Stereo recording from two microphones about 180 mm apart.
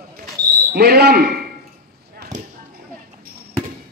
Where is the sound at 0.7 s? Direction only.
60° right (ahead or behind).